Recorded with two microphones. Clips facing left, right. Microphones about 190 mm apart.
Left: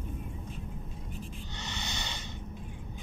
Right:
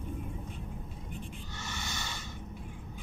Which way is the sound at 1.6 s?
20° left (ahead or behind).